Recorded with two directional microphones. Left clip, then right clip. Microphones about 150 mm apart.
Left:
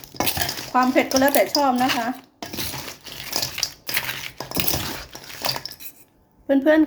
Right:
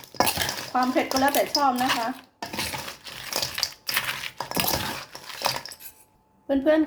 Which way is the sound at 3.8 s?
35° right (ahead or behind).